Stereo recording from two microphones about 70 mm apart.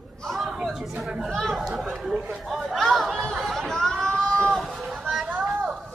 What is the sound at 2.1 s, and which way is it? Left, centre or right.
Speech, centre.